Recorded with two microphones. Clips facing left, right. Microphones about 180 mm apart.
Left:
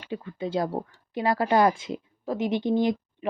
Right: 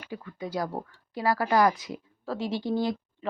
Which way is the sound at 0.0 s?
25° left (ahead or behind).